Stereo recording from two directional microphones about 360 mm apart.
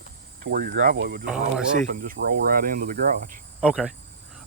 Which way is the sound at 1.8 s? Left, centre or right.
Right.